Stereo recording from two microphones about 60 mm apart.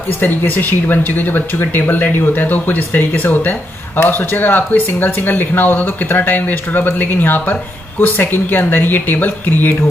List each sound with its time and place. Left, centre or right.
0.2 s speech: left